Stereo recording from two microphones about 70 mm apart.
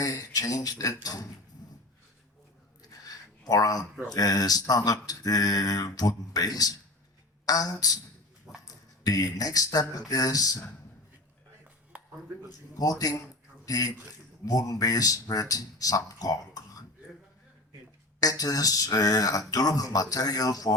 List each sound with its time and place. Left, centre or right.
0.0 s speech: left
2.8 s a sound: left
4.1 s speech: left
8.6 s a sound: left
9.7 s speech: left
12.5 s a man's voice: left
18.2 s speech: left